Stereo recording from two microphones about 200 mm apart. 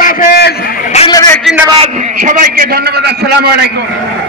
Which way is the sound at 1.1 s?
20° left (ahead or behind).